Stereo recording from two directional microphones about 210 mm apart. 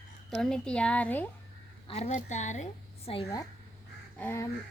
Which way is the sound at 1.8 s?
30° left (ahead or behind).